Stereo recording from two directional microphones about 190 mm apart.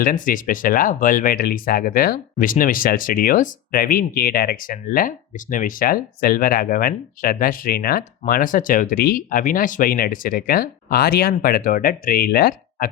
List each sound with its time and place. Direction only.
0.0 s speech: 45° left (ahead or behind)